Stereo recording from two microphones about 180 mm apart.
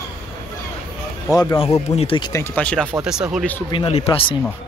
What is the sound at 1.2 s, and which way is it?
Speech, 15° left (ahead or behind).